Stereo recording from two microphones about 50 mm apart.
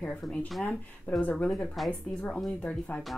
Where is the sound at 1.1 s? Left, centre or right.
Left.